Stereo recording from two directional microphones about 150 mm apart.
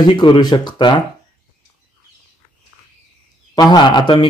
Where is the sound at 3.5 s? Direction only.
30° left (ahead or behind).